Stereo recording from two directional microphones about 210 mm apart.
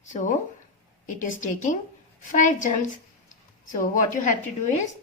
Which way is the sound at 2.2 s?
40° left (ahead or behind).